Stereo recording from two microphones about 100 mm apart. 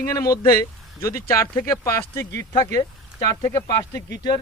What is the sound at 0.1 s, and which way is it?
Speech, 35° left (ahead or behind).